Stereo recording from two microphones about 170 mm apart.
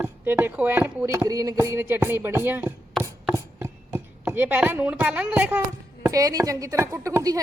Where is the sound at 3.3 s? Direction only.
15° right (ahead or behind).